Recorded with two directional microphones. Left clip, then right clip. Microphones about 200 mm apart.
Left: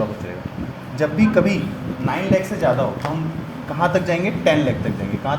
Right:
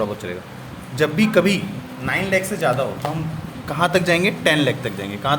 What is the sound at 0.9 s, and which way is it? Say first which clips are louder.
Speech: even; 45° right (ahead or behind).